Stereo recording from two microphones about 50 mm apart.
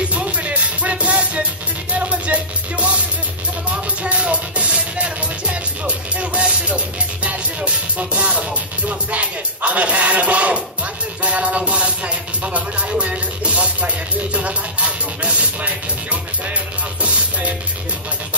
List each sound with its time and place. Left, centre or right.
0.1 s music: right